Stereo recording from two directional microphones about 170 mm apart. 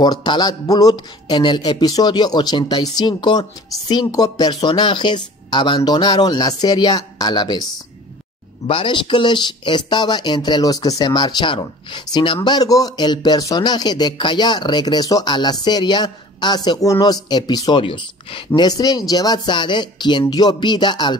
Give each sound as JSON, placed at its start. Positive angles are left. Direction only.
{"t": 0.0, "sound": "speech", "side_deg": 25}
{"t": 8.6, "sound": "speech", "side_deg": 30}